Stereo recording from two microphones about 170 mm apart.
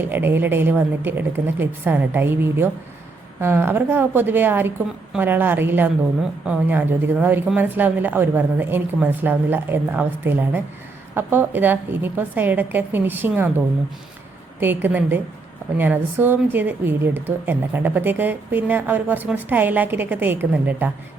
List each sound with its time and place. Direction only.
0.0 s a woman's voice: 10° right (ahead or behind)
14.6 s a woman's voice: 10° right (ahead or behind)